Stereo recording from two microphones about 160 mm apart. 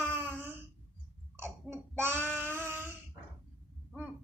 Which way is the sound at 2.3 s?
15° right (ahead or behind).